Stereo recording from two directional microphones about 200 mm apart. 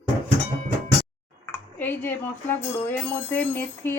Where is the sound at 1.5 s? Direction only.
10° left (ahead or behind).